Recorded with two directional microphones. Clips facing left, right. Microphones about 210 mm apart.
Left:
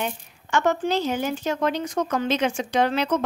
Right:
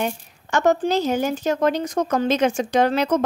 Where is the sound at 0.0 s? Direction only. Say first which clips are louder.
Right 4 dB; 40° right (ahead or behind).